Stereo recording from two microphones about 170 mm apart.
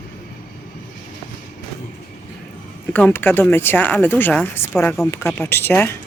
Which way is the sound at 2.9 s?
10° left (ahead or behind).